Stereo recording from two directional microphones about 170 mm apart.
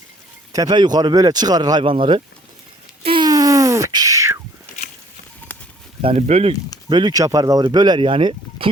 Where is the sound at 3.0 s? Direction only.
30° right (ahead or behind).